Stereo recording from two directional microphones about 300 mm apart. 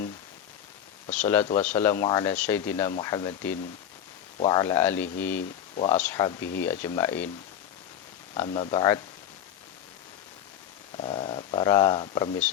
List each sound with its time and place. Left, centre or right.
1.1 s speech: centre
5.4 s speech: left
5.9 s speech: centre
8.4 s speech: centre
10.9 s speech: centre